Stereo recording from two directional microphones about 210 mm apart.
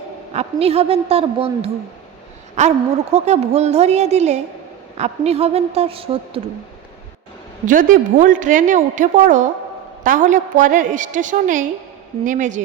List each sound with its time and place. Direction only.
0.3 s a woman's voice: 30° right (ahead or behind)
7.7 s a woman's voice: 40° right (ahead or behind)